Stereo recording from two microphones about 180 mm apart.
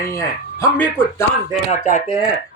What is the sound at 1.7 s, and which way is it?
Speech, 45° left (ahead or behind).